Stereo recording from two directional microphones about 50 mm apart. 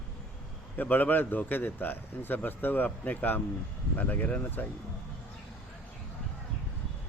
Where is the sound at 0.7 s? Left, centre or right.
Left.